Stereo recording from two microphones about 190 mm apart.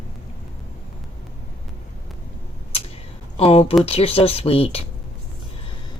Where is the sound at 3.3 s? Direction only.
30° left (ahead or behind).